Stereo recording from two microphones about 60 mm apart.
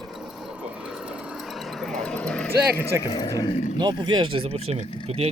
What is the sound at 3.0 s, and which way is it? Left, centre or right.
Speech, left.